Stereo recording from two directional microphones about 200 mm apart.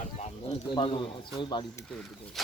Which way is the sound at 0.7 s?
25° left (ahead or behind).